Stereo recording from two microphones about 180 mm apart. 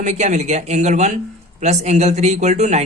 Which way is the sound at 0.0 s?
40° right (ahead or behind).